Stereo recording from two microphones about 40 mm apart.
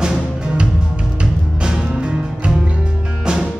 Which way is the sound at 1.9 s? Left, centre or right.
Right.